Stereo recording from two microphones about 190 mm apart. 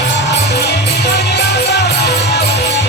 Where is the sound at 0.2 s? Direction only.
65° left (ahead or behind).